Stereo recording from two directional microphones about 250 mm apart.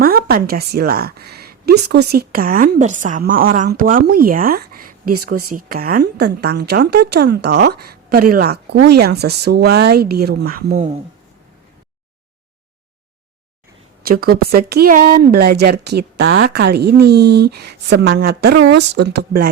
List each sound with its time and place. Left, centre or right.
0.0 s speech: right
14.0 s speech: right